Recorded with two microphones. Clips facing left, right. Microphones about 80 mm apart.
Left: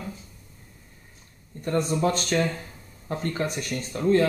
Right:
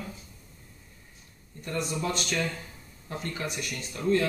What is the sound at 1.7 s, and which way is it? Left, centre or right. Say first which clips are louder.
Speech: left 7 dB; left.